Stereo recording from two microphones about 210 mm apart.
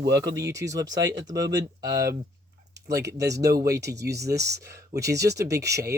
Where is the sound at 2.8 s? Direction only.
15° right (ahead or behind).